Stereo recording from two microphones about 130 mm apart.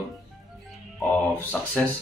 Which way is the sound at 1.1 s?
10° left (ahead or behind).